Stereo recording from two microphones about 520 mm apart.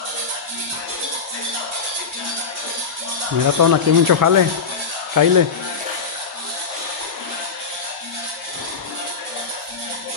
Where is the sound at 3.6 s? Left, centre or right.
Right.